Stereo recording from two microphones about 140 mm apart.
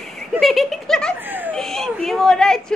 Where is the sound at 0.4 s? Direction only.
Centre (ahead or behind).